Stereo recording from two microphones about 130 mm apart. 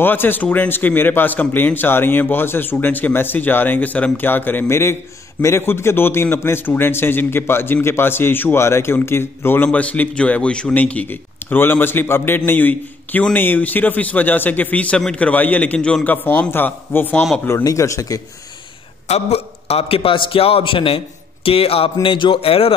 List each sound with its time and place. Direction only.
0.0 s a man's voice: 15° left (ahead or behind)
19.0 s a man's voice: 55° left (ahead or behind)